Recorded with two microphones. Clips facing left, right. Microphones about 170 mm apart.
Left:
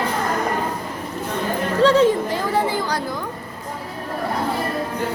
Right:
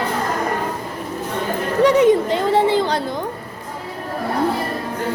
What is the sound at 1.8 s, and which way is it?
Speech, 15° right (ahead or behind).